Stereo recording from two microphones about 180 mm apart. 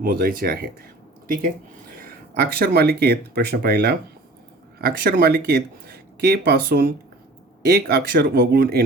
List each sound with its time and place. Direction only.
0.0 s speech: 55° right (ahead or behind)